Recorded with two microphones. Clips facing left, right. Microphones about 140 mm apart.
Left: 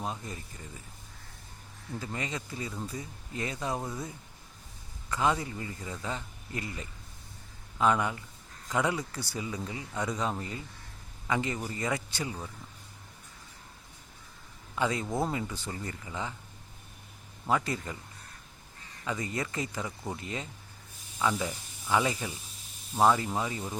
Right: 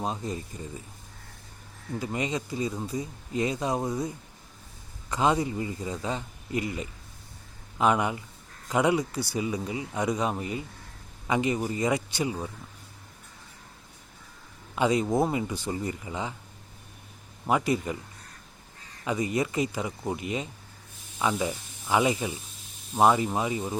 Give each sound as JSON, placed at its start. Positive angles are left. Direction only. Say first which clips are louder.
{"t": 0.0, "sound": "speech", "louder": "right 6 dB", "side_deg": -20}
{"t": 2.0, "sound": "speech", "louder": "right 7 dB", "side_deg": -20}
{"t": 5.1, "sound": "speech", "louder": "right 4 dB", "side_deg": -20}
{"t": 14.8, "sound": "speech", "louder": "right 6 dB", "side_deg": -20}
{"t": 17.4, "sound": "speech", "louder": "right 5 dB", "side_deg": -15}
{"t": 19.0, "sound": "speech", "louder": "right 7 dB", "side_deg": -15}